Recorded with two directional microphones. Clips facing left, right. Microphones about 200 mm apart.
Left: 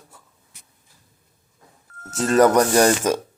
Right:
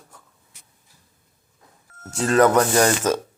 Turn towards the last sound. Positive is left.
turn(degrees=10)  # may be behind; listen again after turning